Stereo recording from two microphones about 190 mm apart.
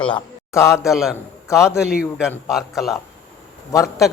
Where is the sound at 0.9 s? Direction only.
Centre (ahead or behind).